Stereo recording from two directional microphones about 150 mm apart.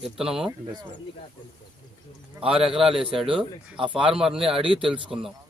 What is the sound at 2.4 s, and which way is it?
Speech, 20° right (ahead or behind).